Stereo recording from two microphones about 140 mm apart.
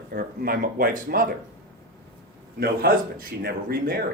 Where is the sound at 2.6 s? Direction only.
90° right.